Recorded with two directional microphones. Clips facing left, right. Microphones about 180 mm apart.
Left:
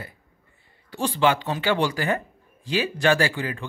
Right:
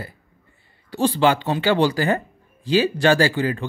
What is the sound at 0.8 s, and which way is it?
Speech, 30° right (ahead or behind).